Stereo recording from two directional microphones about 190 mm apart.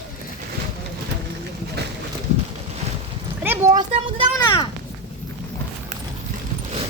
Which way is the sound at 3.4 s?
20° right (ahead or behind).